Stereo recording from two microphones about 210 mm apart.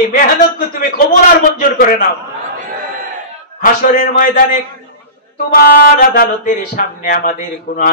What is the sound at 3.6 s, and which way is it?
Speech, 40° left (ahead or behind).